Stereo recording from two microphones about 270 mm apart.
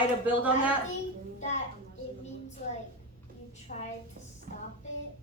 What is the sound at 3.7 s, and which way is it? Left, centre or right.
Speech, left.